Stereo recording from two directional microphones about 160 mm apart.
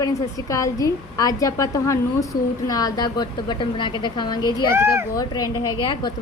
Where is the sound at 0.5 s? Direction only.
20° left (ahead or behind).